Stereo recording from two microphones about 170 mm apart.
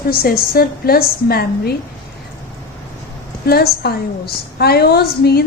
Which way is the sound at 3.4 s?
65° left (ahead or behind).